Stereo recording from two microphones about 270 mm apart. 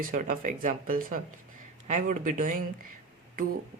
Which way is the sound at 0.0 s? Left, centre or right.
Right.